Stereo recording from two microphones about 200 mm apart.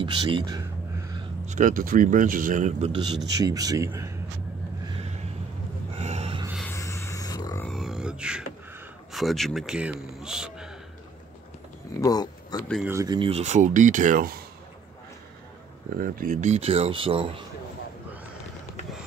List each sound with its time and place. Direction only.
0.0 s a man's voice: 25° right (ahead or behind)
1.4 s speech: 40° right (ahead or behind)
3.3 s a man's voice: 20° right (ahead or behind)
5.9 s gasp: 35° right (ahead or behind)
6.7 s a sound: 15° left (ahead or behind)
7.6 s beatboxing: centre (ahead or behind)
9.1 s a man's voice: centre (ahead or behind)
12.0 s speech: 20° left (ahead or behind)
12.8 s speech: 15° right (ahead or behind); by 14.4 s 45° right (ahead or behind)
16.0 s speech: 40° right (ahead or behind)